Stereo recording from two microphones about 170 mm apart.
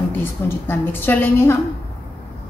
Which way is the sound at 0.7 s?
10° left (ahead or behind).